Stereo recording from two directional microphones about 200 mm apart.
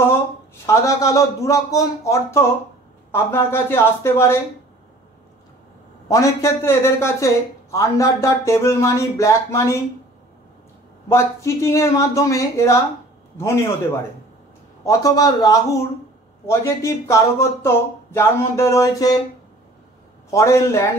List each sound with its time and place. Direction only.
0.7 s speech: 15° left (ahead or behind)
6.0 s speech: 15° left (ahead or behind)
11.1 s speech: 15° left (ahead or behind)
14.9 s speech: 15° left (ahead or behind)
20.2 s speech: 15° left (ahead or behind)